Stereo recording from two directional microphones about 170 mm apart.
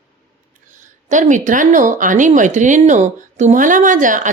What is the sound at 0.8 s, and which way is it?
A woman's voice, 45° right (ahead or behind).